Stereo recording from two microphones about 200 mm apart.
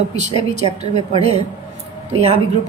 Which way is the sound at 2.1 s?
30° right (ahead or behind).